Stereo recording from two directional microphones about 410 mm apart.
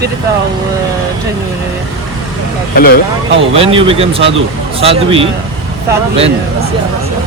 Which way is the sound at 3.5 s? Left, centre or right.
Centre.